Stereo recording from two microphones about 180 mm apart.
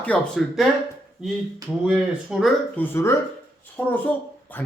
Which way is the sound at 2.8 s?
15° left (ahead or behind).